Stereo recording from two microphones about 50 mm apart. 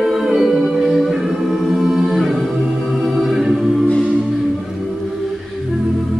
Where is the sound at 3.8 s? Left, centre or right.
Left.